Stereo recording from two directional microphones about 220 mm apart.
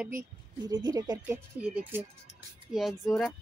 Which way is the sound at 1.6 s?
5° right (ahead or behind).